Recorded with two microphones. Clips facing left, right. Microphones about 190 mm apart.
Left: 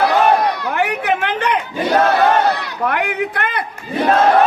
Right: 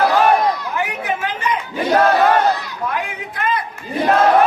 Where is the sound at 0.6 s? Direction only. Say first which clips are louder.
Left 4 dB; 70° left (ahead or behind).